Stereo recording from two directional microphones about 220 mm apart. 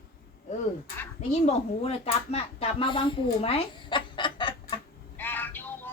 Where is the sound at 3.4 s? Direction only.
25° left (ahead or behind).